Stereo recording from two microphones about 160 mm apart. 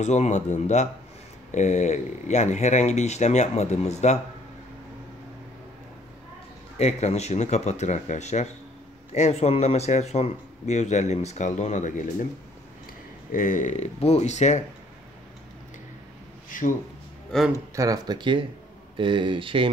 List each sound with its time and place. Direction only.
0.0 s speech: 45° left (ahead or behind)
6.8 s speech: 40° left (ahead or behind)
13.3 s speech: 55° left (ahead or behind)
16.4 s a sound: 55° left (ahead or behind)
17.3 s speech: 5° left (ahead or behind)
17.7 s speech: 20° right (ahead or behind)